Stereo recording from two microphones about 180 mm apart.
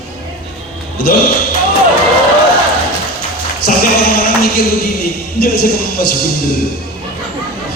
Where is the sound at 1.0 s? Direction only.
55° left (ahead or behind).